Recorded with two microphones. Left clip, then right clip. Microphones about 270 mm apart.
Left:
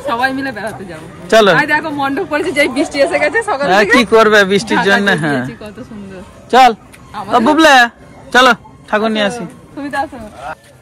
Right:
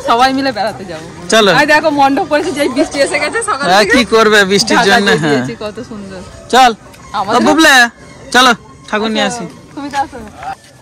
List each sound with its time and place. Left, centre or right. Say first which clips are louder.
0.0 s a man's voice: right 6 dB; centre
1.2 s a man's voice: even; centre
1.6 s a man's voice: right 6 dB; centre
2.7 s a woman's voice: right 1 dB; left
3.6 s speech: right 1 dB; centre
5.5 s a man's voice: right 8 dB; centre
6.5 s a man's voice: even; centre